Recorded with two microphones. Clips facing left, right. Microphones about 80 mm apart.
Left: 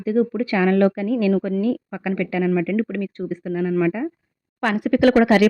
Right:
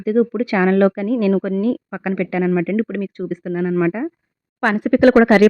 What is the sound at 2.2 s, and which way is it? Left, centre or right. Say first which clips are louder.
Speech: right 3 dB; right.